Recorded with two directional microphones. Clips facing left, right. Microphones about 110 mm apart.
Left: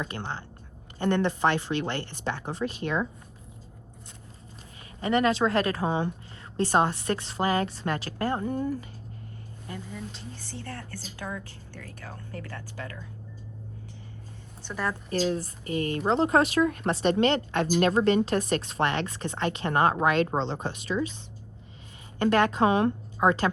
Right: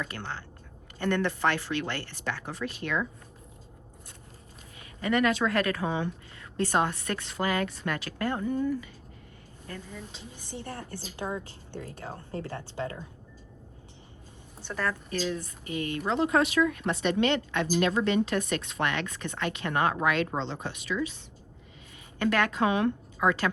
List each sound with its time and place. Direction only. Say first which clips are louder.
0.0 s a woman's voice: left 2 dB; 25° left (ahead or behind)
4.9 s a woman's voice: left 2 dB; 30° left (ahead or behind)
9.6 s speech: left 2 dB; 15° left (ahead or behind)
10.3 s a woman's voice: right 1 dB; 20° right (ahead or behind)
15.1 s a woman's voice: left 4 dB; 40° left (ahead or behind)
22.2 s a woman's voice: left 4 dB; 35° left (ahead or behind)